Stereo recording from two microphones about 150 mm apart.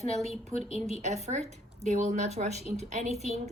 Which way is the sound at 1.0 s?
50° right (ahead or behind).